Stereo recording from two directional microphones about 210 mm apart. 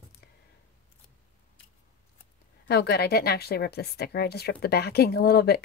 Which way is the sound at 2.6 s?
50° left (ahead or behind).